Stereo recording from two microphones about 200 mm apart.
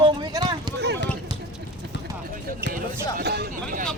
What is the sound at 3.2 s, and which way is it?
Speech, 55° right (ahead or behind).